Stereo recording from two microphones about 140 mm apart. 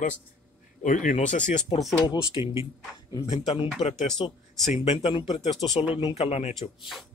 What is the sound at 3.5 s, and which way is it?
Speech, 50° left (ahead or behind).